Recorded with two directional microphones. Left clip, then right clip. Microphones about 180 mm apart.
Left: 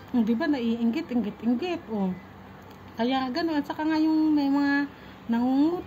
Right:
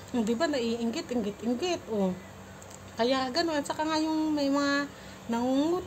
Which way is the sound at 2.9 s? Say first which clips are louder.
Even; 10° right (ahead or behind).